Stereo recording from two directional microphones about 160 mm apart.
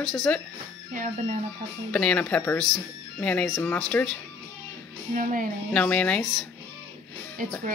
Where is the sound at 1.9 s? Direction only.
5° left (ahead or behind).